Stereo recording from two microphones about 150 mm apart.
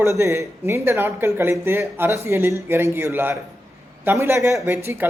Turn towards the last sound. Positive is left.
turn(degrees=-15)  # may be behind; listen again after turning